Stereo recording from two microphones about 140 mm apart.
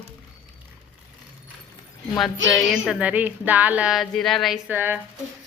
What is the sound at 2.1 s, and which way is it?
Speech, centre (ahead or behind).